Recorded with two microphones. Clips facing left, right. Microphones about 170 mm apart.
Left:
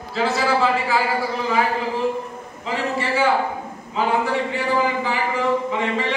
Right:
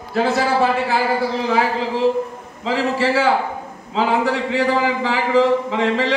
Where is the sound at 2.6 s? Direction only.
90° right.